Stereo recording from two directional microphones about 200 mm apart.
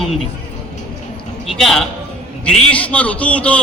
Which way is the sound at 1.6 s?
Centre (ahead or behind).